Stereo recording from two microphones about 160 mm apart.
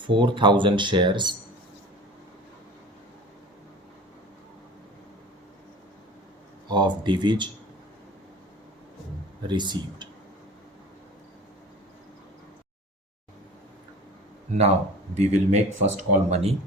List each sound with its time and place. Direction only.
0.0 s speech: 30° right (ahead or behind)
6.7 s speech: 30° right (ahead or behind)
9.5 s speech: 30° right (ahead or behind)
15.1 s speech: 45° right (ahead or behind)